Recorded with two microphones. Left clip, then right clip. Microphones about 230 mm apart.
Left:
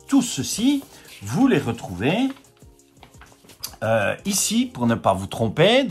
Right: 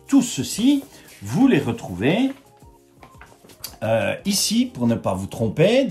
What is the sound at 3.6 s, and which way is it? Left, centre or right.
Speech, centre.